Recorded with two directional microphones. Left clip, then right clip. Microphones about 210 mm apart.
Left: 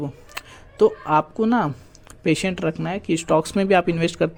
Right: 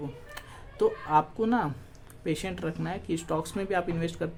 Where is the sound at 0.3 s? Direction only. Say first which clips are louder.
Left 8 dB; 30° left (ahead or behind).